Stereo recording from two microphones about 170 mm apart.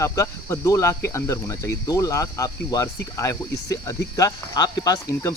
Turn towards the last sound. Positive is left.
turn(degrees=20)  # may be behind; listen again after turning